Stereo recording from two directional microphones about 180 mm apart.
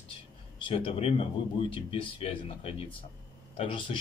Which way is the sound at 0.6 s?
30° left (ahead or behind).